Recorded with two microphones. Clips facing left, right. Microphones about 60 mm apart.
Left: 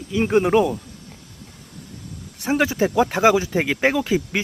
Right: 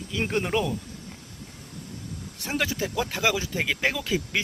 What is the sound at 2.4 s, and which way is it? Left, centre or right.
Speech, left.